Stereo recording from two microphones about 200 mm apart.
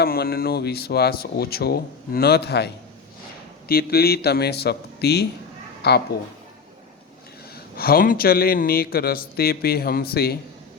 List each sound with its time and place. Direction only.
0.0 s a man's voice: 50° left (ahead or behind)
7.5 s a man's voice: 50° left (ahead or behind)